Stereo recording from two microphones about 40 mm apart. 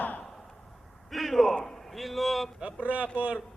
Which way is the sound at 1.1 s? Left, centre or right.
Centre.